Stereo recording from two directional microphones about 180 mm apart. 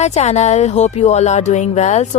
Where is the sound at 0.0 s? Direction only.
40° left (ahead or behind).